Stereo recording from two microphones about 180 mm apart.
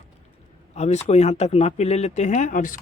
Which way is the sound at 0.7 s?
40° left (ahead or behind).